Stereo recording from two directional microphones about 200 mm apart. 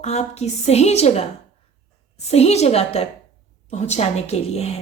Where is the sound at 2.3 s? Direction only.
30° left (ahead or behind).